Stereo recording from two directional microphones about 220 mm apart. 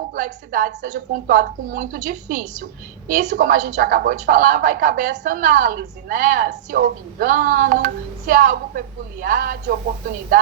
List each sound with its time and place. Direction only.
0.1 s a woman's voice: 35° right (ahead or behind)